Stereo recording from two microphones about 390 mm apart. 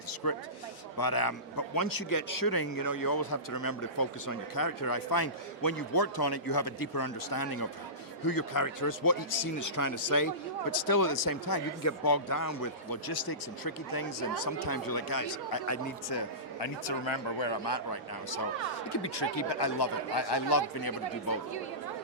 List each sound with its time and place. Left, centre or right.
0.2 s a man's voice: left
16.0 s a man's voice: left
18.9 s a man's voice: left